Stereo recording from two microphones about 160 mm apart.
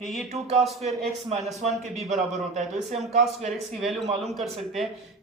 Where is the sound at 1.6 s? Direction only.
45° right (ahead or behind).